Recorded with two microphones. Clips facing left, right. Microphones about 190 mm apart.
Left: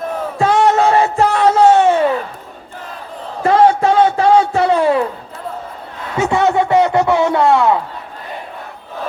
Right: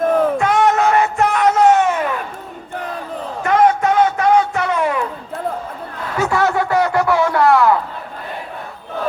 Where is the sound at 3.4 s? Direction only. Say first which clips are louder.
Left 3 dB; 30° left (ahead or behind).